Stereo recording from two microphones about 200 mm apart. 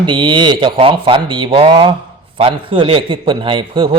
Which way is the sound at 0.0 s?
25° right (ahead or behind).